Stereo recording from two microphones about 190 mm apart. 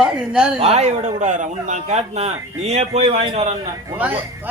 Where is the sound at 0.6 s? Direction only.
35° right (ahead or behind).